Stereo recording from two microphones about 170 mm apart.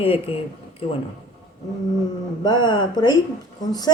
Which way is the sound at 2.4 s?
25° left (ahead or behind).